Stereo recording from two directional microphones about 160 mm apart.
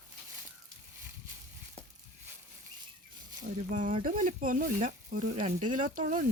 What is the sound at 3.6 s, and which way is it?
Speech, 55° right (ahead or behind).